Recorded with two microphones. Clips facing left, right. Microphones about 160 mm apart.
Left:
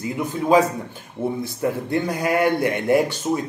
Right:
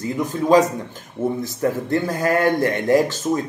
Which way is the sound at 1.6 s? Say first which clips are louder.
Right 2 dB; 15° left (ahead or behind).